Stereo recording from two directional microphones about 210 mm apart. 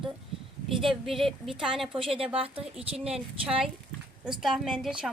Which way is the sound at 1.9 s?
25° right (ahead or behind).